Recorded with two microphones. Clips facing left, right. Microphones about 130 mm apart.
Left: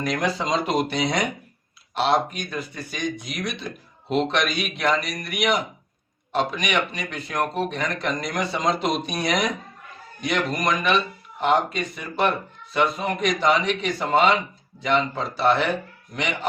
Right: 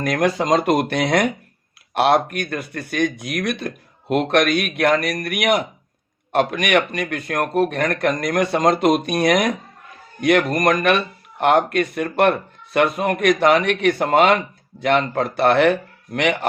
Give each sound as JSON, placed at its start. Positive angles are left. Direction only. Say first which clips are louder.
{"t": 0.0, "sound": "speech", "louder": "right 5 dB", "side_deg": -55}